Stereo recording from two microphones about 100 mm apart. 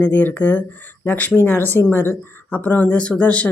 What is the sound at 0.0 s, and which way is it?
Speech, 20° left (ahead or behind).